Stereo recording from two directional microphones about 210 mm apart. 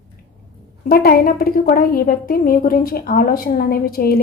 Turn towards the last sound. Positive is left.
turn(degrees=45)  # may be behind; listen again after turning